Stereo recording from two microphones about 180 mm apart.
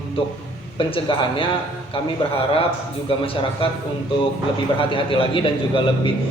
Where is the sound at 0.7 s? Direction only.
30° left (ahead or behind).